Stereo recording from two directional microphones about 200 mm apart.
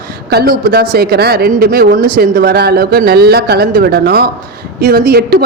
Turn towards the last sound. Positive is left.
turn(degrees=-50)  # may be behind; listen again after turning